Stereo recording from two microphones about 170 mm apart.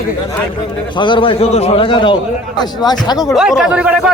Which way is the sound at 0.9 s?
30° left (ahead or behind).